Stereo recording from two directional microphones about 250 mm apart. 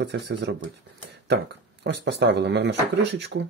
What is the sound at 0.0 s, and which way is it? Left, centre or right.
Speech, right.